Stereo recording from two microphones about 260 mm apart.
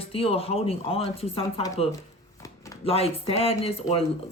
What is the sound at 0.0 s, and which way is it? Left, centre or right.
Speech, left.